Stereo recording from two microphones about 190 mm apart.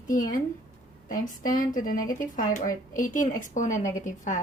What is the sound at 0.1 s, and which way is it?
Speech, 45° left (ahead or behind).